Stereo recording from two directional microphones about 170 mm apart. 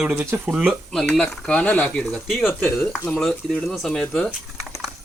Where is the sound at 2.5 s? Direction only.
10° left (ahead or behind).